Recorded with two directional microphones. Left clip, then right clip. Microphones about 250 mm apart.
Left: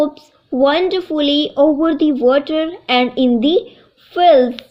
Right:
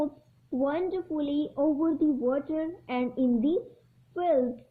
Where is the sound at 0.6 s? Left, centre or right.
Centre.